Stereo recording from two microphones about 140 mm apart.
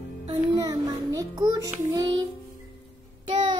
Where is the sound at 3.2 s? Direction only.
35° right (ahead or behind).